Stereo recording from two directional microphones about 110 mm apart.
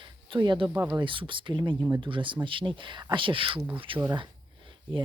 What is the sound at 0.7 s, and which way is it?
Speech, 20° right (ahead or behind).